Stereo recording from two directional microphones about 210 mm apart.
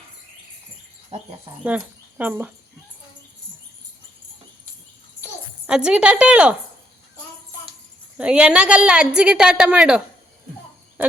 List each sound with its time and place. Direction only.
1.1 s insect: 30° right (ahead or behind)
1.6 s speech: 5° right (ahead or behind)
5.6 s a woman's voice: 5° right (ahead or behind)
8.2 s a woman's voice: 5° right (ahead or behind)